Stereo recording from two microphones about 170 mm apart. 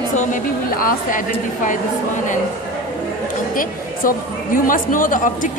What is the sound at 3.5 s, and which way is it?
A woman's voice, 55° left (ahead or behind).